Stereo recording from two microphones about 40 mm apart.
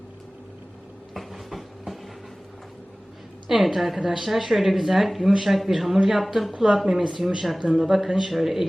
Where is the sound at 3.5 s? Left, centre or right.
Centre.